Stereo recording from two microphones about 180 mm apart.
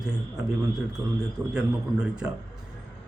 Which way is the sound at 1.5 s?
5° right (ahead or behind).